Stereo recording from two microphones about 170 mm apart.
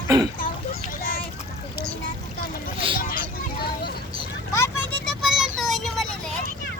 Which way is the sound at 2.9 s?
55° left (ahead or behind).